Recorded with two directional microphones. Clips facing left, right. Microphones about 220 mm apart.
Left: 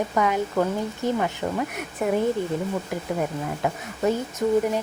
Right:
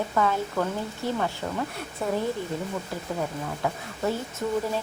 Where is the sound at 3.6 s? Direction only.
20° left (ahead or behind).